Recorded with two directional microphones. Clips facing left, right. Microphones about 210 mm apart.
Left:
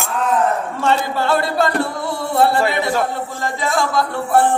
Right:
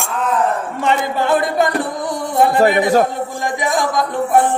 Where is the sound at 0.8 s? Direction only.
15° right (ahead or behind).